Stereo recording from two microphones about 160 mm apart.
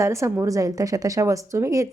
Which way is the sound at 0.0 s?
20° right (ahead or behind).